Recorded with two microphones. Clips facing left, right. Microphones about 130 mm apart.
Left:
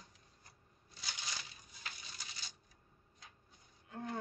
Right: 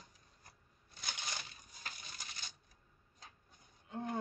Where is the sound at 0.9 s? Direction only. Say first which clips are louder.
Right 2 dB; 50° right (ahead or behind).